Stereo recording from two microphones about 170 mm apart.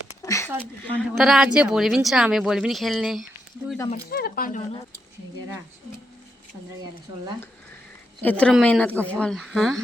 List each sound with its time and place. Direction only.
0.2 s a sound: 20° left (ahead or behind)
0.9 s speech: centre (ahead or behind)
4.1 s speech: 60° left (ahead or behind)
8.2 s a woman's voice: 10° left (ahead or behind)